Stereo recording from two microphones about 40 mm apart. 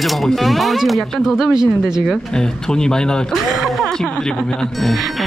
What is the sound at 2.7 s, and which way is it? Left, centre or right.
Speech, centre.